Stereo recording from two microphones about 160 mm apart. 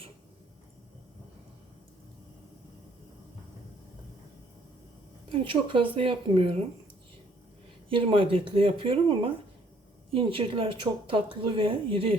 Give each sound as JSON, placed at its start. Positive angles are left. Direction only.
{"t": 5.3, "sound": "a woman's voice", "side_deg": -30}
{"t": 7.9, "sound": "a woman's voice", "side_deg": -35}